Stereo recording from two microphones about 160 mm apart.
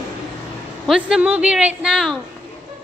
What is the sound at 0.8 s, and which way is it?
A woman's voice, 5° right (ahead or behind).